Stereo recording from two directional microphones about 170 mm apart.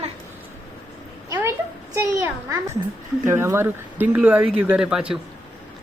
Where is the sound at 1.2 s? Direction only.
20° right (ahead or behind).